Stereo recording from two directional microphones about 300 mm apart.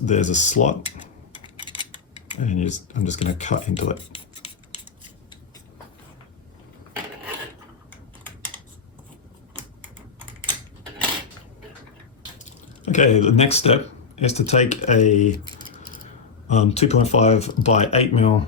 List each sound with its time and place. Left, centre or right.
0.0 s speech: left
1.3 s a sound: centre
2.4 s speech: left
12.5 s speech: left